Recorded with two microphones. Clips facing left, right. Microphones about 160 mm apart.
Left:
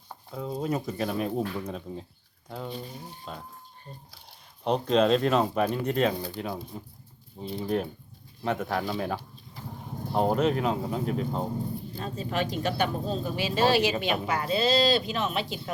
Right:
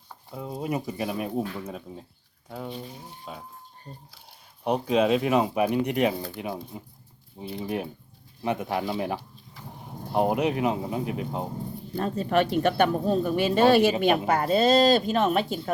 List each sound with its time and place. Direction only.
0.3 s speech: 5° right (ahead or behind)
4.6 s speech: 10° right (ahead or behind)
11.9 s speech: 55° right (ahead or behind)